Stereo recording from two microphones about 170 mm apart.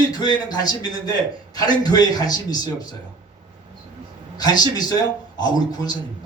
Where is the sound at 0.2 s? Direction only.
25° left (ahead or behind).